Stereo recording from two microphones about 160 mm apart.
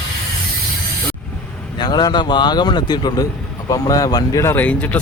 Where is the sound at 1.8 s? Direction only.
25° left (ahead or behind).